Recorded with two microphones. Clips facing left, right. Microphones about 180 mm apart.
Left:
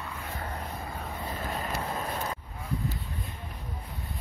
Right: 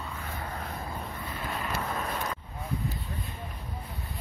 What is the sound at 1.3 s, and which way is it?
Wind noise, 45° left (ahead or behind).